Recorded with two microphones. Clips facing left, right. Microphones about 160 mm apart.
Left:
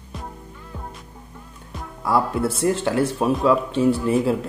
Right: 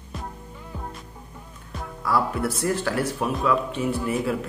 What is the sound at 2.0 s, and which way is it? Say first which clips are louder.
Speech: left 3 dB; 25° left (ahead or behind).